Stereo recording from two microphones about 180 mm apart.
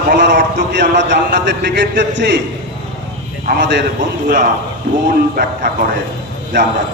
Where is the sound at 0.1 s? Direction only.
75° right (ahead or behind).